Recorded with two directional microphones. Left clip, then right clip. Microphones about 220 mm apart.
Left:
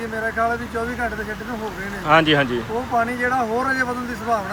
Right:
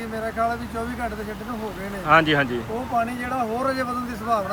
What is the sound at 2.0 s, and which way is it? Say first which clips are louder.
Speech: left 2 dB; 5° left (ahead or behind).